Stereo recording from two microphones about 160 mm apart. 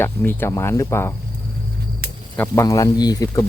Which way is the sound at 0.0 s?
15° left (ahead or behind).